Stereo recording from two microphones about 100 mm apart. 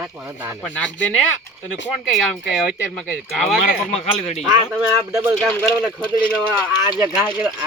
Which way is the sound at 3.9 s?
90° left.